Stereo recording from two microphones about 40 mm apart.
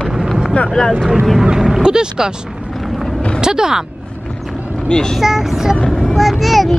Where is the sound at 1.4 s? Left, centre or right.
Centre.